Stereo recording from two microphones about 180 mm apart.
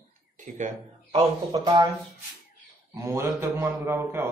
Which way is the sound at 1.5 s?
25° right (ahead or behind).